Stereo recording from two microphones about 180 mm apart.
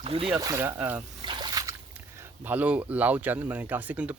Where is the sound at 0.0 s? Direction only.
30° right (ahead or behind).